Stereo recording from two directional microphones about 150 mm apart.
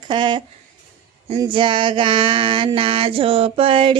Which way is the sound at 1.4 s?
35° right (ahead or behind).